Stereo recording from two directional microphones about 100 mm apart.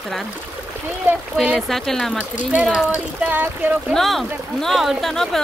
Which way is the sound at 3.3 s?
20° right (ahead or behind).